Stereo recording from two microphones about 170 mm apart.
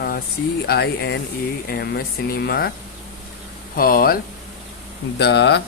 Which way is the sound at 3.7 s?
55° left (ahead or behind).